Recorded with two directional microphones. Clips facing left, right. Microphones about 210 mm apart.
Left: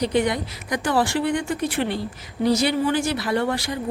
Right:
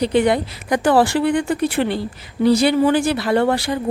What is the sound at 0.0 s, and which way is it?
Speech, 30° right (ahead or behind).